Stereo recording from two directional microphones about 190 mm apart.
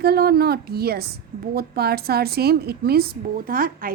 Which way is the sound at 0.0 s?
55° right (ahead or behind).